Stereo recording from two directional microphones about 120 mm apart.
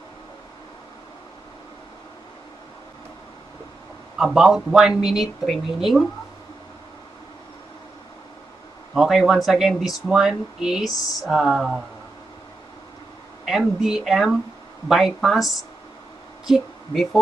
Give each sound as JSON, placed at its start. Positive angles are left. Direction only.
{"t": 4.2, "sound": "speech", "side_deg": -5}
{"t": 8.9, "sound": "speech", "side_deg": -5}
{"t": 13.5, "sound": "speech", "side_deg": -5}